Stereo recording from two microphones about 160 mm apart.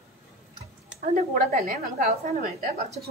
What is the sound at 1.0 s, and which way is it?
A woman's voice, 60° right (ahead or behind).